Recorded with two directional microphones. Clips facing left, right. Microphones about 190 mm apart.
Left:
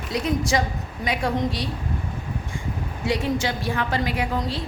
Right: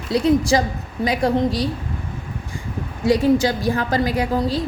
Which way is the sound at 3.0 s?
35° right (ahead or behind).